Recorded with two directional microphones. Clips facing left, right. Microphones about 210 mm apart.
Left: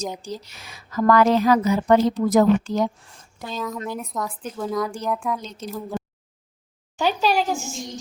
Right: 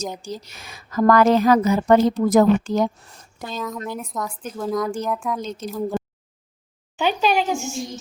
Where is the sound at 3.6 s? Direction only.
Centre (ahead or behind).